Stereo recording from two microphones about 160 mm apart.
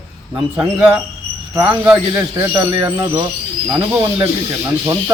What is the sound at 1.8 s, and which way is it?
A man's voice, 20° right (ahead or behind).